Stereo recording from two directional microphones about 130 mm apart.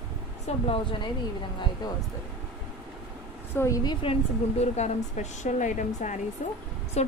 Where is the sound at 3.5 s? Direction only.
25° left (ahead or behind).